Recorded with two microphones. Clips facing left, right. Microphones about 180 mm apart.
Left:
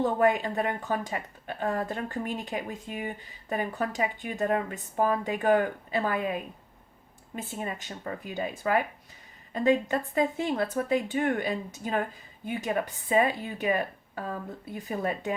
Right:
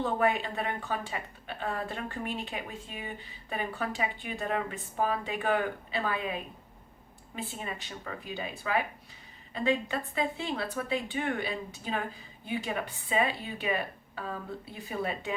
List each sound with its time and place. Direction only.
0.0 s a woman's voice: 45° left (ahead or behind)